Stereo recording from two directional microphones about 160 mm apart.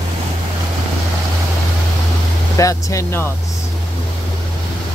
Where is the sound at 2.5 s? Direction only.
20° left (ahead or behind).